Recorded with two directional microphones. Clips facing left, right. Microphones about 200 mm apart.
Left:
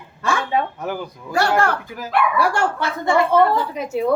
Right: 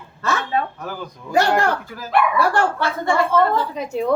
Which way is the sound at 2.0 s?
10° left (ahead or behind).